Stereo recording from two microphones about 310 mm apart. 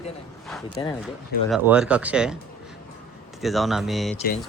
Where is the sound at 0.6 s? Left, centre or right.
Centre.